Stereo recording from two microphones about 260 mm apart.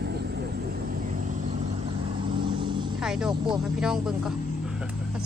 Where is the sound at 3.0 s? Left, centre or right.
Centre.